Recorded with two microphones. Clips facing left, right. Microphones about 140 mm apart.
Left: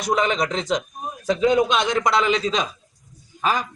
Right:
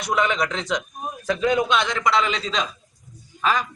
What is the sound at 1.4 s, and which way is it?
Speech, 10° left (ahead or behind).